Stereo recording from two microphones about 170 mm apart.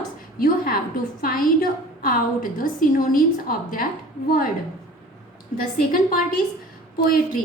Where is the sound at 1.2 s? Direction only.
60° left (ahead or behind).